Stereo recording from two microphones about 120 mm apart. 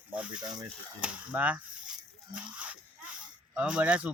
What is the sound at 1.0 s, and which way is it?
Speech, 10° right (ahead or behind).